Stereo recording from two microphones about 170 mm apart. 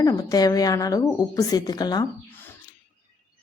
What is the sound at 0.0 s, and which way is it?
Speech, 20° left (ahead or behind).